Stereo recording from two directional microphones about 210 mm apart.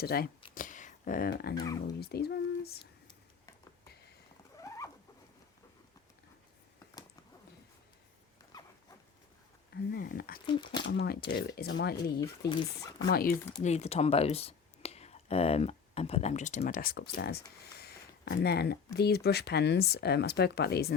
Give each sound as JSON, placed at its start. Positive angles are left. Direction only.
{"t": 0.0, "sound": "speech", "side_deg": 45}
{"t": 0.5, "sound": "a sound", "side_deg": 40}
{"t": 1.5, "sound": "speech", "side_deg": 15}
{"t": 2.0, "sound": "speech", "side_deg": 50}
{"t": 4.5, "sound": "rodents", "side_deg": 15}
{"t": 9.9, "sound": "speech", "side_deg": 45}
{"t": 10.4, "sound": "speech", "side_deg": 20}
{"t": 10.8, "sound": "speech", "side_deg": 55}
{"t": 12.5, "sound": "speech", "side_deg": 20}
{"t": 13.1, "sound": "speech", "side_deg": 45}
{"t": 13.6, "sound": "speech", "side_deg": 30}